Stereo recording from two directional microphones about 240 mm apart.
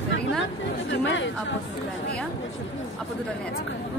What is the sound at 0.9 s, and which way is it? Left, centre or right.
Speech, left.